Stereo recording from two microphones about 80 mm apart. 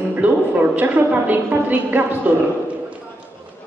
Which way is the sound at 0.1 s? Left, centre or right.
Right.